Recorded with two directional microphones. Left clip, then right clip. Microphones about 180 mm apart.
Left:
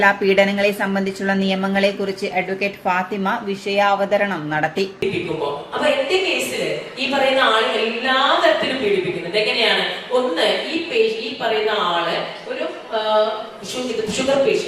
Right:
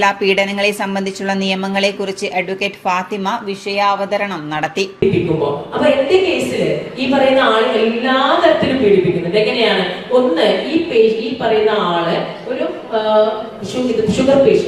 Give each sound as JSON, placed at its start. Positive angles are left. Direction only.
{"t": 0.0, "sound": "a woman's voice", "side_deg": -25}
{"t": 4.9, "sound": "a woman's voice", "side_deg": -10}